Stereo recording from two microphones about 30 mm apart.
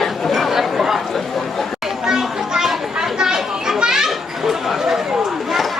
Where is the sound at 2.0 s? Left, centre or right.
Centre.